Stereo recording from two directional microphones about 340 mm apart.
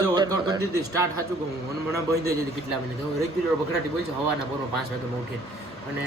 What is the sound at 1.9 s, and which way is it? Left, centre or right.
Speech, centre.